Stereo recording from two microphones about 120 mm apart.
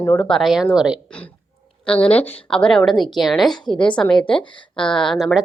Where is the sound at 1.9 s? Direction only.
10° left (ahead or behind).